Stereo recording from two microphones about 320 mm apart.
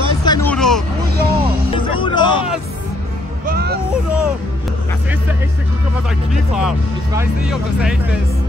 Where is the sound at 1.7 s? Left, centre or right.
Centre.